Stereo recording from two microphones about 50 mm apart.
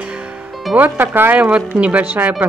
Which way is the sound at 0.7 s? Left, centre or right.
Right.